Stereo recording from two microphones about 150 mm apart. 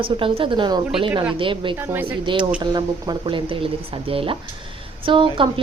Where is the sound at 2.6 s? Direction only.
30° right (ahead or behind).